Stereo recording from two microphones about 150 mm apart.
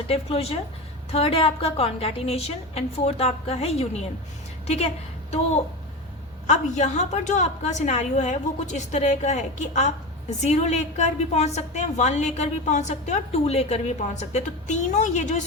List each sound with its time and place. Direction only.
0.1 s a woman's voice: 40° left (ahead or behind)
6.5 s a woman's voice: 50° left (ahead or behind)